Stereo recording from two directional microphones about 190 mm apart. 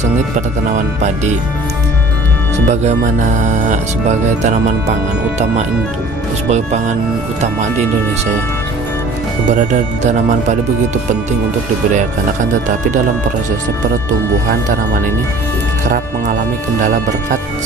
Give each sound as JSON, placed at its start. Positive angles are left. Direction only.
{"t": 2.6, "sound": "speech", "side_deg": -40}
{"t": 6.5, "sound": "speech", "side_deg": -35}
{"t": 9.5, "sound": "speech", "side_deg": -40}
{"t": 15.9, "sound": "speech", "side_deg": -40}